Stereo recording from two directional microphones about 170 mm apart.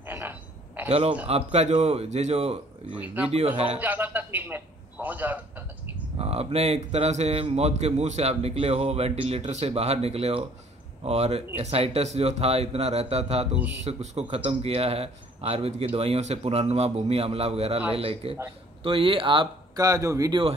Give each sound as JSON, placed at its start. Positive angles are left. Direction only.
{"t": 0.0, "sound": "a sound", "side_deg": -10}
{"t": 0.8, "sound": "speech", "side_deg": -40}
{"t": 3.8, "sound": "a man's voice", "side_deg": -10}
{"t": 6.1, "sound": "speech", "side_deg": -35}